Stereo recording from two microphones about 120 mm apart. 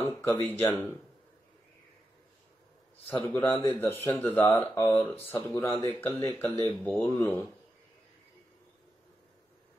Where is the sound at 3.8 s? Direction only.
15° left (ahead or behind).